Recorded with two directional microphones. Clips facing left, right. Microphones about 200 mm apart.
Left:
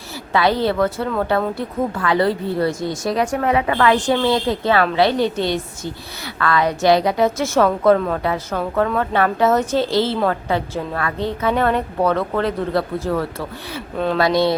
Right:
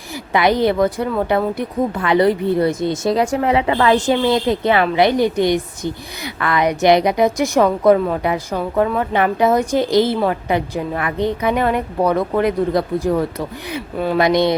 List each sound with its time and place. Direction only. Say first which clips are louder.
0.3 s a woman's voice: right 2 dB; 15° right (ahead or behind)